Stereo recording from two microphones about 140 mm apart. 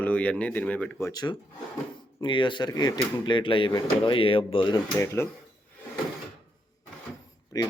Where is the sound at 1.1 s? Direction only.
30° left (ahead or behind).